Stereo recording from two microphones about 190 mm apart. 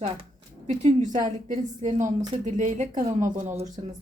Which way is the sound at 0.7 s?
40° right (ahead or behind).